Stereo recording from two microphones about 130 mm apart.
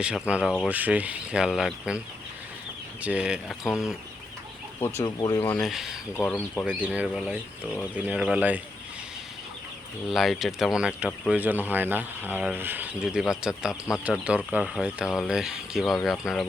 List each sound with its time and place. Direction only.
0.0 s speech: 10° right (ahead or behind)
3.0 s speech: 10° right (ahead or behind)
5.0 s speech: 30° left (ahead or behind)
5.5 s speech: centre (ahead or behind)
6.3 s speech: 15° left (ahead or behind)
6.7 s speech: 10° right (ahead or behind)
10.1 s speech: centre (ahead or behind)